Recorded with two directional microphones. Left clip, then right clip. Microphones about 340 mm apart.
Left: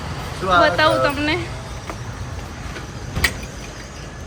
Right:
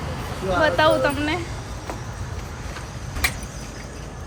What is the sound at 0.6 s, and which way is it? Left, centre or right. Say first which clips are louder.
Speech: even; centre.